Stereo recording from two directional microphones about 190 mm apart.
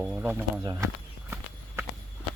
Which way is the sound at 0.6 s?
20° right (ahead or behind).